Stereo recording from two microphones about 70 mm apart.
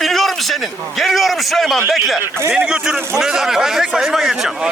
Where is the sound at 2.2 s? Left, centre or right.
Right.